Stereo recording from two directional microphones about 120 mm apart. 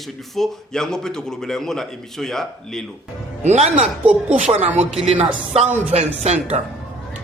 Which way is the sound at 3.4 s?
70° right (ahead or behind).